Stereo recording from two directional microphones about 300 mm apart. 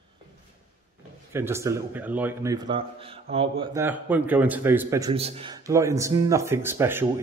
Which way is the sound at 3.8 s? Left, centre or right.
Centre.